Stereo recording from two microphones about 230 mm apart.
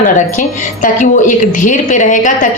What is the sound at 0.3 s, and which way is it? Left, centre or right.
A woman's voice, left.